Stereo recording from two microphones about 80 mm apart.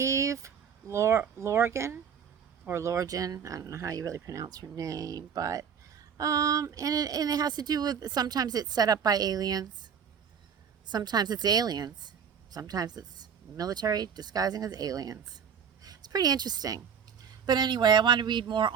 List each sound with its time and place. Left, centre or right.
0.0 s a sound: right
1.4 s a woman's voice: right
10.8 s a woman's voice: right